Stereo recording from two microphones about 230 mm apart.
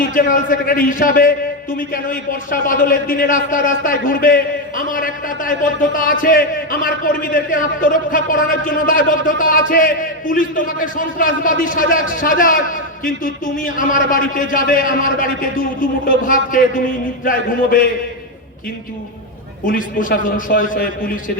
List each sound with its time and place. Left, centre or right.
0.0 s a man's voice: left
19.6 s a man's voice: left